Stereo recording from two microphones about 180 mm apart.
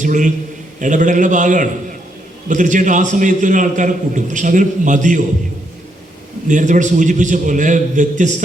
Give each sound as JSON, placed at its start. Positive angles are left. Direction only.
{"t": 0.0, "sound": "a man's voice", "side_deg": -45}
{"t": 6.5, "sound": "a man's voice", "side_deg": -45}